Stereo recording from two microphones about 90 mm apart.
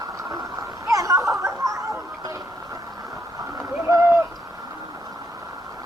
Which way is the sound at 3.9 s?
35° right (ahead or behind).